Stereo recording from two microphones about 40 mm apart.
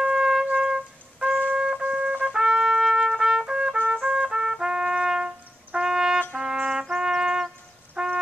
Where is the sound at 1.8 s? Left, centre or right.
Right.